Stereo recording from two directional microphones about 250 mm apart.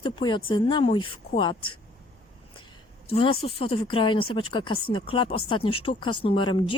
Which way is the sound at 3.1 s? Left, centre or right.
Left.